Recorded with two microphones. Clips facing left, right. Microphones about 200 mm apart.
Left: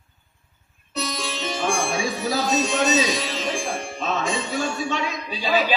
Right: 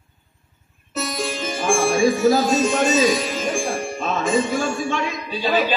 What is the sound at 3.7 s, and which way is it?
Music, 50° right (ahead or behind).